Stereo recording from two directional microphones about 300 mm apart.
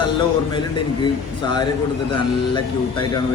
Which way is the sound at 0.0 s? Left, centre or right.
Centre.